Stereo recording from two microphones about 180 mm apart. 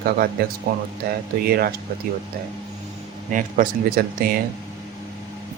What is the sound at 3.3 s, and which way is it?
Speech, 50° right (ahead or behind).